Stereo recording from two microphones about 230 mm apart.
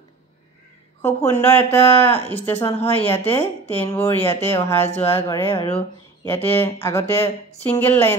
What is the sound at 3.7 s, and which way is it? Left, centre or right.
Speech, centre.